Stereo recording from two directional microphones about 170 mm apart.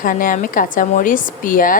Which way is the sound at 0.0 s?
50° left (ahead or behind).